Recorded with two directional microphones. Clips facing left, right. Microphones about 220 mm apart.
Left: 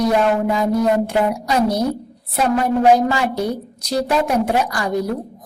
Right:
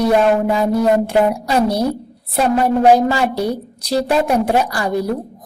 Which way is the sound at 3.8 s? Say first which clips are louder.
Right 2 dB; 30° right (ahead or behind).